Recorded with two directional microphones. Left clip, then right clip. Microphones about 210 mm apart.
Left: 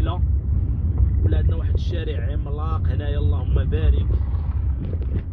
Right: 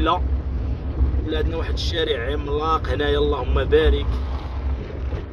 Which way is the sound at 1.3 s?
25° right (ahead or behind).